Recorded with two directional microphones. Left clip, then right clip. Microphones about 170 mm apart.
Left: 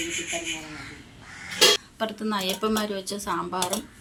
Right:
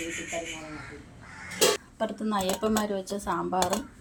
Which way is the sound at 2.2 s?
30° right (ahead or behind).